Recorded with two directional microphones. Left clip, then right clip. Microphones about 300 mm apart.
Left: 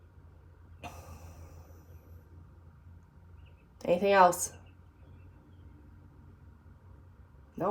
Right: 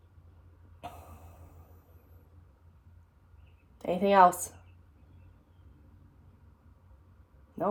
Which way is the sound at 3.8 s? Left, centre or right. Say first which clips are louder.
Right 1 dB; centre.